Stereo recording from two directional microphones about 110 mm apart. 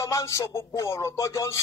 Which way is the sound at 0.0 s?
30° left (ahead or behind).